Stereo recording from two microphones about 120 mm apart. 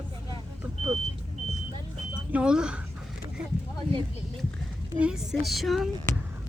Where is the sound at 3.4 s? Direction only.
5° right (ahead or behind).